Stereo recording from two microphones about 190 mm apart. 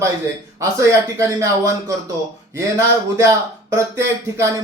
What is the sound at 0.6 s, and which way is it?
Speech, 15° right (ahead or behind).